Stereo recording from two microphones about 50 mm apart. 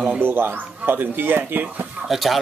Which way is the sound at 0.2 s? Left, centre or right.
Right.